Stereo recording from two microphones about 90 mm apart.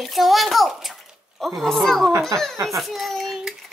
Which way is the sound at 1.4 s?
Centre (ahead or behind).